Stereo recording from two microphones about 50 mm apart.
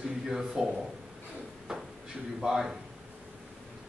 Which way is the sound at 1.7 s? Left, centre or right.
Centre.